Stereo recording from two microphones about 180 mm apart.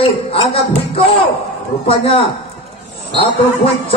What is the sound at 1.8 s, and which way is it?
Speech, 30° left (ahead or behind).